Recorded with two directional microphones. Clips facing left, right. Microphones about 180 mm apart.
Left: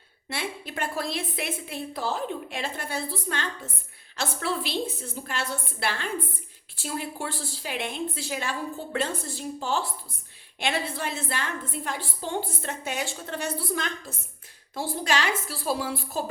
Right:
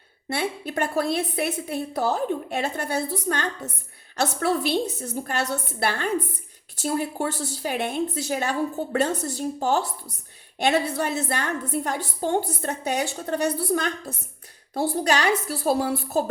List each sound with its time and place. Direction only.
0.3 s a woman's voice: 40° right (ahead or behind)